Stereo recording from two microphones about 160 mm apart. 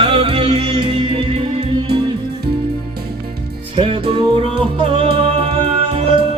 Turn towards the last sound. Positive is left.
turn(degrees=-40)  # may be behind; listen again after turning